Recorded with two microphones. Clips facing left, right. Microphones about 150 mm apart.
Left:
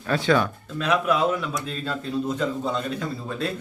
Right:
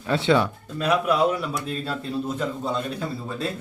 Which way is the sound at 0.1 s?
25° right (ahead or behind).